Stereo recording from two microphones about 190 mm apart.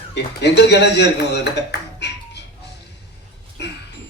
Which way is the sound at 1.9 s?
65° left (ahead or behind).